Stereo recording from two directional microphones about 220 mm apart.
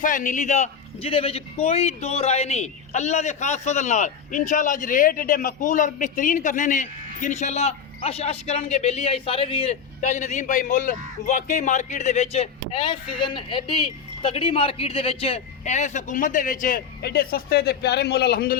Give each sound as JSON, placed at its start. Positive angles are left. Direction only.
{"t": 0.0, "sound": "a man's voice", "side_deg": 35}